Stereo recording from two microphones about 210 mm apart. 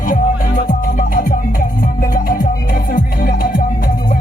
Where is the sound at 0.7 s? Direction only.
40° left (ahead or behind).